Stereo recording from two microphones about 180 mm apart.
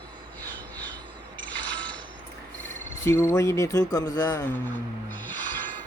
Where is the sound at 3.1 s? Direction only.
15° left (ahead or behind).